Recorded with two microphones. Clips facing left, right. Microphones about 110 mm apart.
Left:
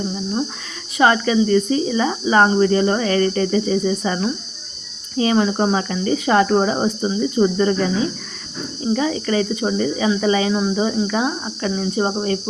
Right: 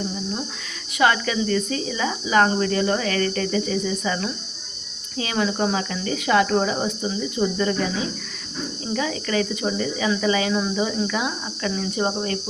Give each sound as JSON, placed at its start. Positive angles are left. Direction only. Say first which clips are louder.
{"t": 0.9, "sound": "speech", "louder": "left 5 dB", "side_deg": 30}
{"t": 8.9, "sound": "speech", "louder": "left 6 dB", "side_deg": 30}